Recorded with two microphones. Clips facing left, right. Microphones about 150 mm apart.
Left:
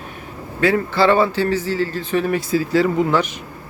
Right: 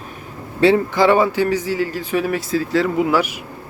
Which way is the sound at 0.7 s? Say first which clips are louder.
Right 1 dB; 15° right (ahead or behind).